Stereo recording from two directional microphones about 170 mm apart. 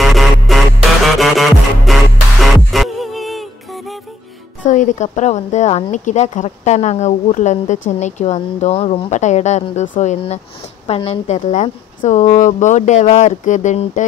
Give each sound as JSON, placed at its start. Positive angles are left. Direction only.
{"t": 0.0, "sound": "music", "side_deg": 0}
{"t": 4.6, "sound": "speech", "side_deg": 45}